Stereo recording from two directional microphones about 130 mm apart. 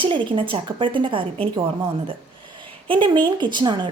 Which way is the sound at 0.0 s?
40° right (ahead or behind).